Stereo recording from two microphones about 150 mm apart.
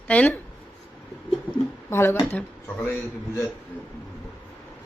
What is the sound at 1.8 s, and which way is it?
Speech, 15° left (ahead or behind).